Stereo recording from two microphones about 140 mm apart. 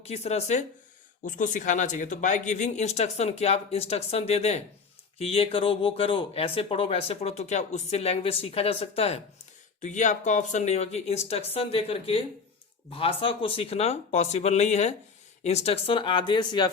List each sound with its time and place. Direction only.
0.0 s speech: 50° left (ahead or behind)
1.2 s speech: 70° left (ahead or behind); by 9.2 s 45° left (ahead or behind)
9.8 s speech: 60° left (ahead or behind); by 16.7 s 30° left (ahead or behind)